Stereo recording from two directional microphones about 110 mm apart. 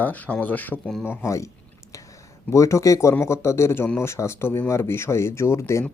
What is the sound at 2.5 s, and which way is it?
Speech, 25° left (ahead or behind).